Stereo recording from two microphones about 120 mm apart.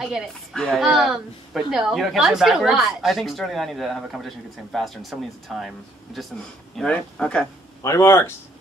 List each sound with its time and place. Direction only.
0.0 s a woman's voice: centre (ahead or behind)
6.8 s speech: 10° left (ahead or behind)
7.8 s speech: 25° left (ahead or behind)